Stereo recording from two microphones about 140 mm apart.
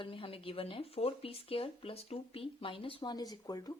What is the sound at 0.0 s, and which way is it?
Speech, 40° left (ahead or behind).